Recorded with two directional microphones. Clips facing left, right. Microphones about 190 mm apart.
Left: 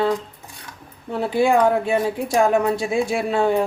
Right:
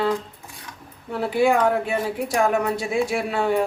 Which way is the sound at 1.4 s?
25° left (ahead or behind).